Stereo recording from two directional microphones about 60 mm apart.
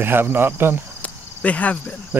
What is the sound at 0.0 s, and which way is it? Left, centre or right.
Speech, right.